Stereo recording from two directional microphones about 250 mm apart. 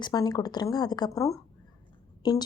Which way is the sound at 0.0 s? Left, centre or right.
Centre.